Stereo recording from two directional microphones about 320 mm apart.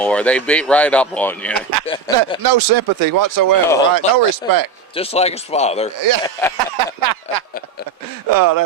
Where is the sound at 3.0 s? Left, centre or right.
Right.